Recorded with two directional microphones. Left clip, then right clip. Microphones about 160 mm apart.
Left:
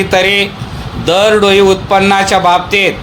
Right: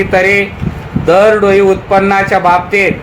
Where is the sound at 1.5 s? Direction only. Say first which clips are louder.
Even; 45° left (ahead or behind).